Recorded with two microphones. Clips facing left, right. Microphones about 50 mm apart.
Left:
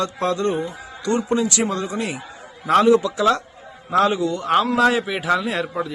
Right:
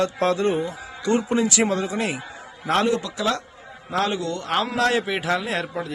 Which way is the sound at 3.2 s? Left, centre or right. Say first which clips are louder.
Left 6 dB; left.